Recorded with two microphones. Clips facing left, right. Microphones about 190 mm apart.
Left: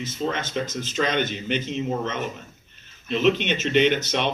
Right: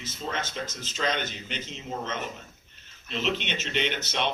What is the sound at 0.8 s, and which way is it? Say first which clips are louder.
Speech: left 5 dB; 60° left (ahead or behind).